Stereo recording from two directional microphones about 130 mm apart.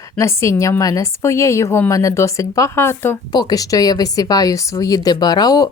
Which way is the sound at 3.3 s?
30° left (ahead or behind).